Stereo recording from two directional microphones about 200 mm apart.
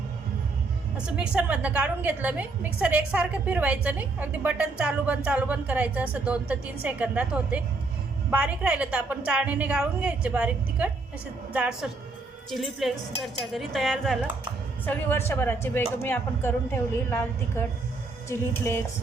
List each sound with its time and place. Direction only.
0.9 s a woman's voice: 5° right (ahead or behind); by 17.2 s 10° left (ahead or behind)
18.3 s speech: 10° left (ahead or behind)